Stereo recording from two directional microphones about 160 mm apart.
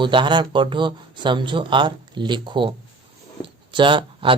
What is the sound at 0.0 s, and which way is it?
Speech, 30° right (ahead or behind).